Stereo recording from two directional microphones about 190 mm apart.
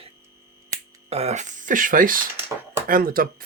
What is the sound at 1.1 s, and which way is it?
Speech, 35° right (ahead or behind).